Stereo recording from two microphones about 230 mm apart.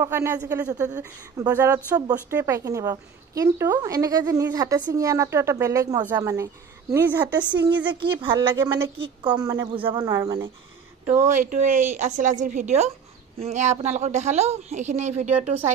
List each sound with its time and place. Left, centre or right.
0.0 s a woman's voice: centre
7.9 s a woman's voice: right
8.5 s a woman's voice: centre
8.9 s a woman's voice: right
11.1 s a woman's voice: right